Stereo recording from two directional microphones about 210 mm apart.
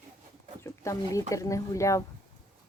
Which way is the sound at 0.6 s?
15° left (ahead or behind).